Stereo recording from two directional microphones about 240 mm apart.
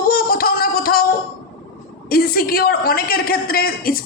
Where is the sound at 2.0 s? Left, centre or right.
Left.